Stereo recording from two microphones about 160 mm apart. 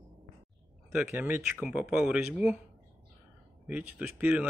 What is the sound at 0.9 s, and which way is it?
Speech, 15° right (ahead or behind).